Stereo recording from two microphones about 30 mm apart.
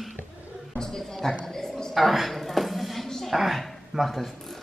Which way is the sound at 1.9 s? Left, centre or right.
Centre.